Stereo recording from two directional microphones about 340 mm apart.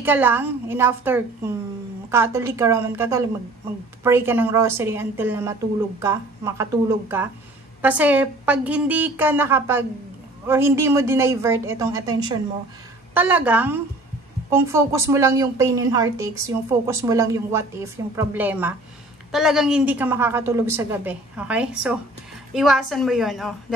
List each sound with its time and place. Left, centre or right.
0.0 s a woman's voice: centre